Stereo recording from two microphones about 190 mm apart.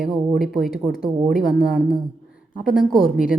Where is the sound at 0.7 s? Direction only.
50° left (ahead or behind).